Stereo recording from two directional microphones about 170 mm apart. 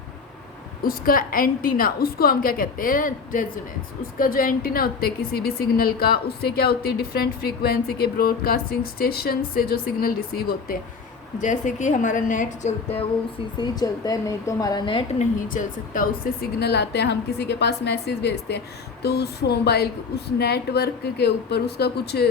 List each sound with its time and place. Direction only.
0.8 s a woman's voice: 55° left (ahead or behind)
11.3 s a woman's voice: 45° left (ahead or behind)
13.6 s a woman's voice: 20° left (ahead or behind)
15.2 s a woman's voice: 50° left (ahead or behind); by 22.3 s 70° left (ahead or behind)